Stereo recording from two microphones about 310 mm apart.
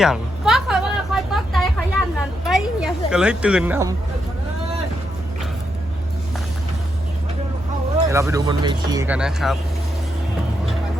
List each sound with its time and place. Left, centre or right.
0.0 s a sound: centre
3.1 s speech: centre
8.1 s speech: centre